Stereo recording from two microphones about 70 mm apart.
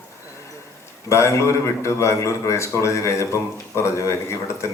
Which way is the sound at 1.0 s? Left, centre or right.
Left.